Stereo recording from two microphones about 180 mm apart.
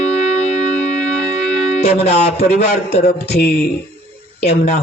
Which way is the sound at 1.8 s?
35° left (ahead or behind).